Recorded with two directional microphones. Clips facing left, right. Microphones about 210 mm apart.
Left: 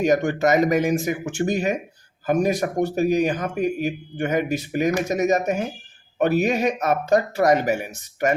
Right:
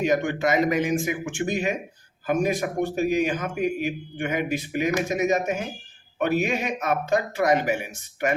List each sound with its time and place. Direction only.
0.0 s a man's voice: 40° left (ahead or behind)